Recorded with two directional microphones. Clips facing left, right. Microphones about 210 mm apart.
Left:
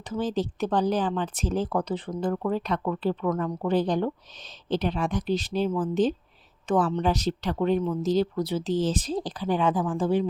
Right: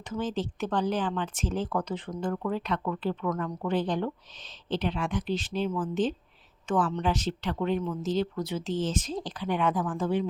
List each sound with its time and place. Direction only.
0.0 s speech: 35° left (ahead or behind)